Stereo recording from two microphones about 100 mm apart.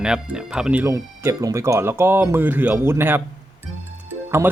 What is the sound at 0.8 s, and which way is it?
Speech, 30° right (ahead or behind).